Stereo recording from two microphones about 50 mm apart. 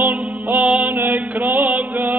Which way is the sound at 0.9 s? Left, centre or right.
Right.